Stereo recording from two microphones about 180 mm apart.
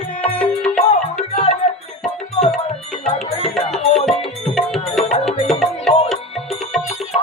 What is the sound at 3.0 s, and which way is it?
Music, 40° left (ahead or behind).